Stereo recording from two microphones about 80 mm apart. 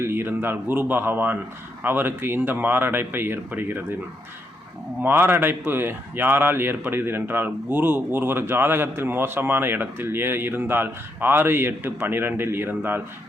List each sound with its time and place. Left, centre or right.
0.0 s speech: right
5.0 s speech: right